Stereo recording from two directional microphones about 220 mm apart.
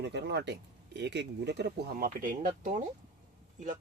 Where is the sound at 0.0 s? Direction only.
50° right (ahead or behind).